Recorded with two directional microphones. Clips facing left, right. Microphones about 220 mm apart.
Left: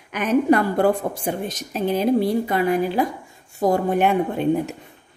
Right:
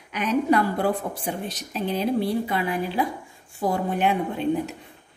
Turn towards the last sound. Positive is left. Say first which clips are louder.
# left 4 dB
turn(degrees=50)  # may be behind; listen again after turning